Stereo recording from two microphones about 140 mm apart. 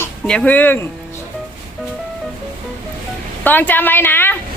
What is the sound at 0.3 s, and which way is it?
Speech, 10° left (ahead or behind).